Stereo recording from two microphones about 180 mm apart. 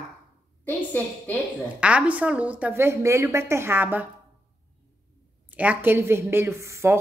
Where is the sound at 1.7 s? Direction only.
5° right (ahead or behind).